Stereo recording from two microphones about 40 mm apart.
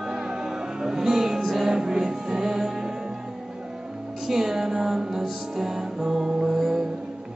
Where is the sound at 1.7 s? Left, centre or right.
Centre.